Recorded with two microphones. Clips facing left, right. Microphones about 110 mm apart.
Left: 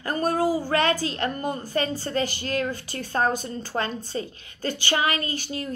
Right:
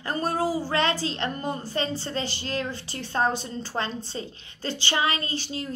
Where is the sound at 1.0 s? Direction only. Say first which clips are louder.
Left 2 dB; 25° right (ahead or behind).